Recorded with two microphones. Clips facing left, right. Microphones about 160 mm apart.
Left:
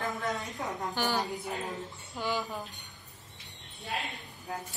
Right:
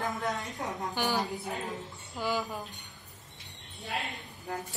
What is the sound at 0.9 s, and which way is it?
Speech, 15° right (ahead or behind).